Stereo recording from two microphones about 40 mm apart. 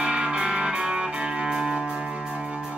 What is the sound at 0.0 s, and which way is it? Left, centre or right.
Music, right.